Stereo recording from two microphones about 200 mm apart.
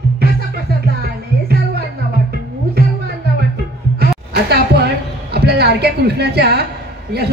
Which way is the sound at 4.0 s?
55° right (ahead or behind).